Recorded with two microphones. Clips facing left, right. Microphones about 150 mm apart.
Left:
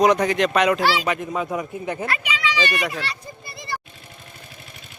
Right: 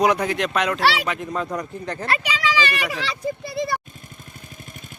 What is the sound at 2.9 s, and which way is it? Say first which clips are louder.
Speech: right 5 dB; 90° right.